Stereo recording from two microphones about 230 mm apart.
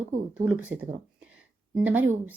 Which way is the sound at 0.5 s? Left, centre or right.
Centre.